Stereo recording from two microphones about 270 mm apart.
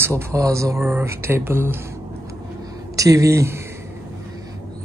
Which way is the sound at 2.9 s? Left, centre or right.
Centre.